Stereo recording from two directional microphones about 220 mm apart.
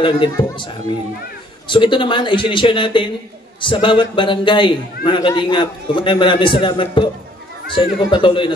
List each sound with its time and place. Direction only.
0.0 s a man's voice: 20° left (ahead or behind)
1.7 s a man's voice: 20° left (ahead or behind)